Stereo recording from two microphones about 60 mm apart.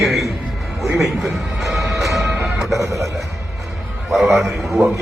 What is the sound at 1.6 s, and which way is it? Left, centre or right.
Music, centre.